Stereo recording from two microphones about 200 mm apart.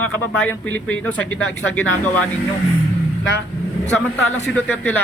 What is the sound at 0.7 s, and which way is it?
Speech, 10° left (ahead or behind).